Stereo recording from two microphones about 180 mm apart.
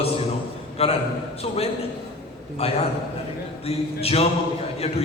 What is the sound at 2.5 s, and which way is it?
A man's voice, 35° left (ahead or behind).